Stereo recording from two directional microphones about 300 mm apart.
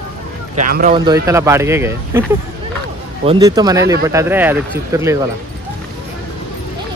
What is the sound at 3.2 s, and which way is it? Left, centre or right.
Speech, centre.